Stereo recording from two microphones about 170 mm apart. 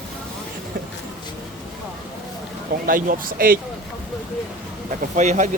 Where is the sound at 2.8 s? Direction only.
55° right (ahead or behind).